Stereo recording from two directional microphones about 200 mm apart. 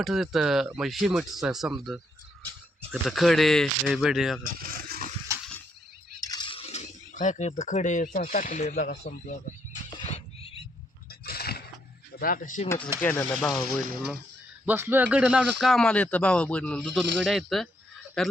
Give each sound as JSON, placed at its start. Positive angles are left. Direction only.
{"t": 0.0, "sound": "speech", "side_deg": 0}
{"t": 2.9, "sound": "speech", "side_deg": 0}
{"t": 4.7, "sound": "a sound", "side_deg": -45}
{"t": 6.2, "sound": "a man's voice", "side_deg": 20}
{"t": 10.0, "sound": "a sound", "side_deg": 30}
{"t": 11.1, "sound": "a sound", "side_deg": 50}
{"t": 12.2, "sound": "speech", "side_deg": 45}
{"t": 12.6, "sound": "speech", "side_deg": 15}
{"t": 14.7, "sound": "speech", "side_deg": -10}